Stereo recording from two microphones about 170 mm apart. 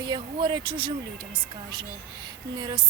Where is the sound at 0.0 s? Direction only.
25° right (ahead or behind).